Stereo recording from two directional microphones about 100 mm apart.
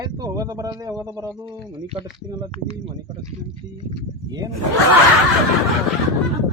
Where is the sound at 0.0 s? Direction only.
40° right (ahead or behind).